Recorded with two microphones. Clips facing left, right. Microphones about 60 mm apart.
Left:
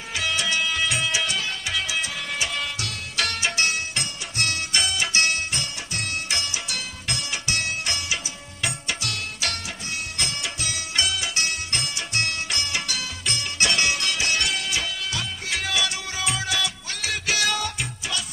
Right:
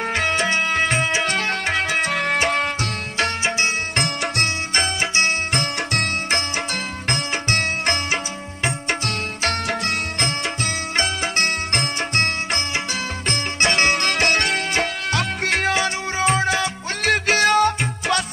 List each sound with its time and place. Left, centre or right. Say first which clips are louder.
0.1 s music: right 3 dB; right
3.2 s music: right 3 dB; right
3.9 s music: right 9 dB; right
4.7 s music: right 3 dB; right
5.5 s music: right 9 dB; right
9.7 s music: right 9 dB; right